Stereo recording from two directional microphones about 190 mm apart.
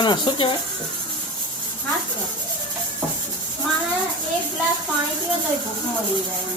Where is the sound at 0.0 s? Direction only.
25° left (ahead or behind).